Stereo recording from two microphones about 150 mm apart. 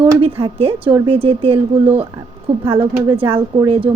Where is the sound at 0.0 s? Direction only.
35° right (ahead or behind).